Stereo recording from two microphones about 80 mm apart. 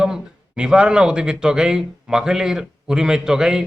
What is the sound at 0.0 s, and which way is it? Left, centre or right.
Speech, centre.